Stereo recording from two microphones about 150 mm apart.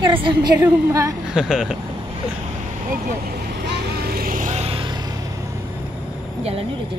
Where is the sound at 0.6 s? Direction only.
20° right (ahead or behind).